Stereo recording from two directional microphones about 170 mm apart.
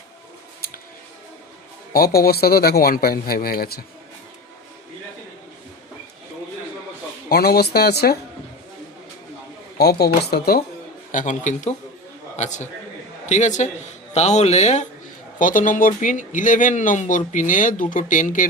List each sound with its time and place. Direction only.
1.9 s speech: 65° left (ahead or behind)
7.3 s speech: 65° left (ahead or behind)
9.7 s speech: 70° left (ahead or behind)
11.1 s speech: 50° left (ahead or behind)
15.4 s speech: 50° left (ahead or behind)